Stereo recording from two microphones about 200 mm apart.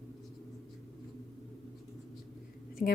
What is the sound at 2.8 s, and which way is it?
Speech, 45° left (ahead or behind).